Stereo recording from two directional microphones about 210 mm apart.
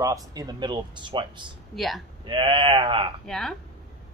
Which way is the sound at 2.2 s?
25° right (ahead or behind).